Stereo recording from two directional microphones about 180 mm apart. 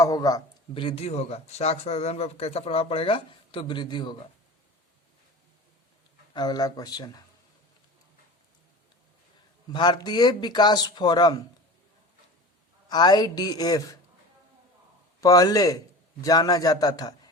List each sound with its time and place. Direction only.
0.0 s a man's voice: 20° left (ahead or behind)
6.3 s speech: 20° left (ahead or behind)
9.7 s speech: 25° left (ahead or behind)
12.9 s speech: 25° left (ahead or behind)
15.2 s speech: 20° left (ahead or behind)